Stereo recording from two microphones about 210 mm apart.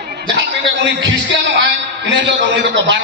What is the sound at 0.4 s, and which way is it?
A man's voice, 60° right (ahead or behind).